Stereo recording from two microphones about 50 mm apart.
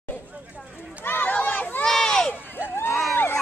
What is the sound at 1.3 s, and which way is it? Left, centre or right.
Crowd, left.